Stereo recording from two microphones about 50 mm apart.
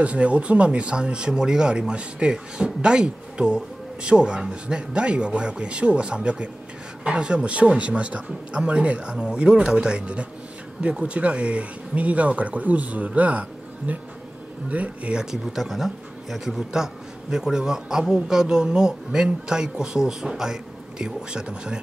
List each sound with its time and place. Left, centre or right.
0.0 s speech: right
15.5 s a man's voice: centre